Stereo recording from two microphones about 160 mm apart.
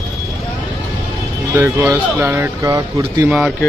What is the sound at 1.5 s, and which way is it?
Speech, 15° right (ahead or behind).